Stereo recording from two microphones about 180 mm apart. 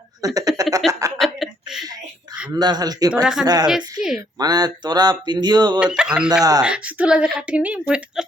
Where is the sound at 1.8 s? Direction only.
20° right (ahead or behind).